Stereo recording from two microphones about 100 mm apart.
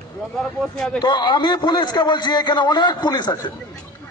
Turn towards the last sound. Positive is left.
turn(degrees=45)  # may be behind; listen again after turning